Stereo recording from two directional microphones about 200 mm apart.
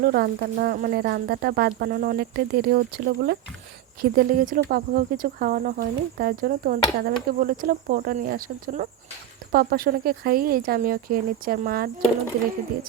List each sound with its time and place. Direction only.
0.0 s speech: 50° right (ahead or behind)